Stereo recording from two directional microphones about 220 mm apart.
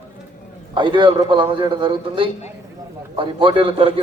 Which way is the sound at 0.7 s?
20° right (ahead or behind).